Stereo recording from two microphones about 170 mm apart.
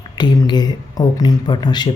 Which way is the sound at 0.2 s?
25° left (ahead or behind).